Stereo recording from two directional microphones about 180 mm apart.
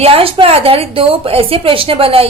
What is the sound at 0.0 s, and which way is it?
A woman's voice, 30° right (ahead or behind).